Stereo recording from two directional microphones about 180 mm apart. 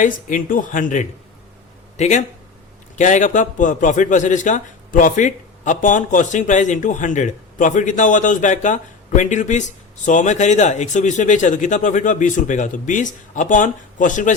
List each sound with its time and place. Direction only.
0.0 s a man's voice: 45° left (ahead or behind)